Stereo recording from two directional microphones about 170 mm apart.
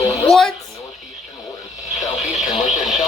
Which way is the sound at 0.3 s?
5° left (ahead or behind).